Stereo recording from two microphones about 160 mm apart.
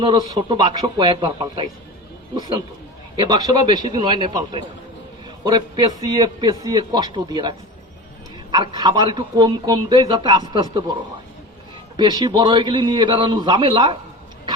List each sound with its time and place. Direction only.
0.0 s a man's voice: 30° right (ahead or behind)
3.2 s a man's voice: 25° right (ahead or behind)
11.9 s a man's voice: 25° right (ahead or behind)